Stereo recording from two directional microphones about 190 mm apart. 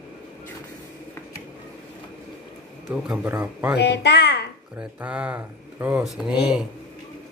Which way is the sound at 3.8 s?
65° left (ahead or behind).